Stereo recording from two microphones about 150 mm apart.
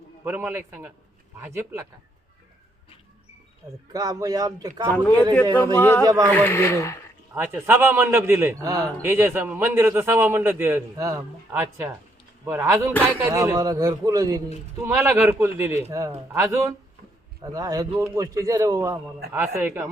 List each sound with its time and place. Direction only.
0.3 s a man's voice: 10° right (ahead or behind)
3.9 s a man's voice: 25° right (ahead or behind)
5.0 s speech: 10° left (ahead or behind)
6.1 s a man's voice: 25° right (ahead or behind)
6.3 s speech: 15° left (ahead or behind)
7.3 s a man's voice: 15° right (ahead or behind)